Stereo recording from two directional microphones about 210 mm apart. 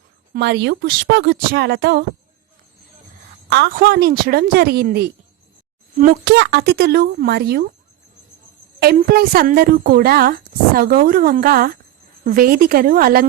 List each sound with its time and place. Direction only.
0.3 s speech: 55° right (ahead or behind)
3.5 s speech: 50° right (ahead or behind)
6.2 s speech: 55° right (ahead or behind)
8.8 s speech: 45° right (ahead or behind)